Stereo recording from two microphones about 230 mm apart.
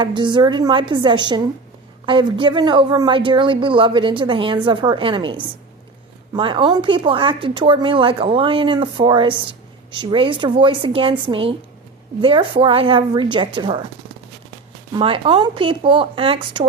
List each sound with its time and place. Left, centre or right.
0.0 s a woman's voice: right
14.9 s a woman's voice: right